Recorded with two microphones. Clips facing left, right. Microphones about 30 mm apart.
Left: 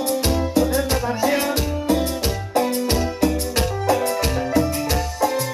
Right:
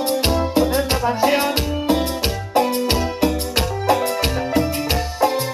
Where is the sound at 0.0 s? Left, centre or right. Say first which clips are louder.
Right 2 dB; right.